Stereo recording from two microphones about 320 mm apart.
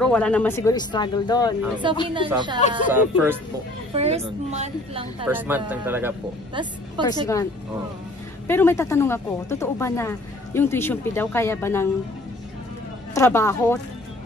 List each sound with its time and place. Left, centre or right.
0.0 s speech: centre
1.8 s speech: centre
3.9 s a woman's voice: centre
5.2 s speech: centre
7.1 s speech: centre
8.5 s speech: centre
13.1 s speech: centre